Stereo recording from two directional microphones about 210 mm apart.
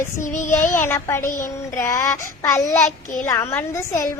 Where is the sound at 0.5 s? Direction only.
10° left (ahead or behind).